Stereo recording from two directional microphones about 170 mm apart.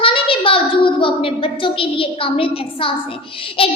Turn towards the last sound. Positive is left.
turn(degrees=30)  # may be behind; listen again after turning